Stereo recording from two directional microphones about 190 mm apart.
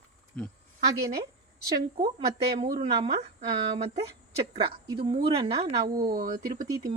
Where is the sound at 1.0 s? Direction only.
20° right (ahead or behind).